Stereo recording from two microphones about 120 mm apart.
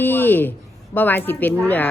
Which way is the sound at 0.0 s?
15° left (ahead or behind).